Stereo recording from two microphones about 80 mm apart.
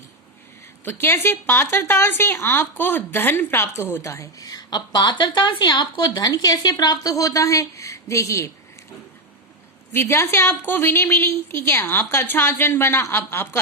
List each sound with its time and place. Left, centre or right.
0.9 s a woman's voice: left
9.9 s a woman's voice: left
10.5 s speech: left